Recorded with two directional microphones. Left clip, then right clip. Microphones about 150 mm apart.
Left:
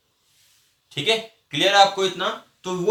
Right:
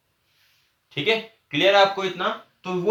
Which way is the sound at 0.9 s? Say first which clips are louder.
Left 1 dB; 20° right (ahead or behind).